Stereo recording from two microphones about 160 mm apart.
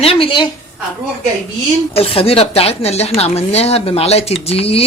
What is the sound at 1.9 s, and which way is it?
A woman's voice, 35° left (ahead or behind).